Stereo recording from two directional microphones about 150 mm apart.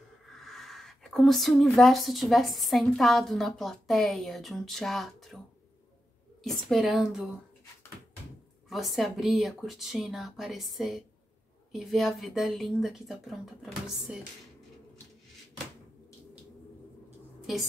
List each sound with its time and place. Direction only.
0.4 s speech: centre (ahead or behind)
6.4 s speech: centre (ahead or behind)
8.6 s speech: centre (ahead or behind)